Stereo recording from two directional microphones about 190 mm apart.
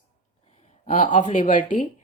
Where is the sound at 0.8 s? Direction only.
45° left (ahead or behind).